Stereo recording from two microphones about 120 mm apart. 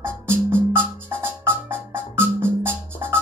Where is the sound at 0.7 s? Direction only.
20° right (ahead or behind).